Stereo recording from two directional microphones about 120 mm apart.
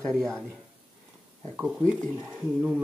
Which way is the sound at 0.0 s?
5° left (ahead or behind).